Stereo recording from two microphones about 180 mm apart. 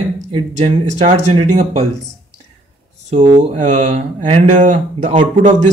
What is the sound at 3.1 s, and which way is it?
Speech, 45° right (ahead or behind).